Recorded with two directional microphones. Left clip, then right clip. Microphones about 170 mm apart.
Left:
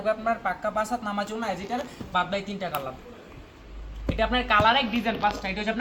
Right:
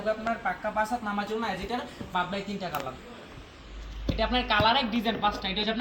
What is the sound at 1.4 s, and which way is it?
A woman's voice, 15° left (ahead or behind).